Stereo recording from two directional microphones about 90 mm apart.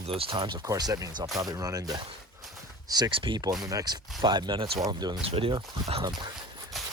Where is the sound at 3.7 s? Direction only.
45° right (ahead or behind).